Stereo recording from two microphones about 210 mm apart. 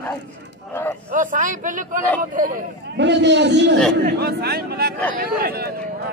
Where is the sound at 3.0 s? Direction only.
55° right (ahead or behind).